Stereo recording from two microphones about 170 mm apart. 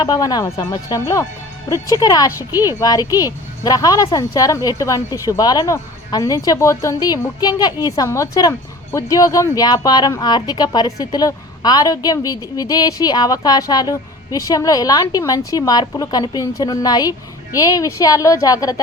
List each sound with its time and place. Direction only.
0.0 s speech: 25° left (ahead or behind)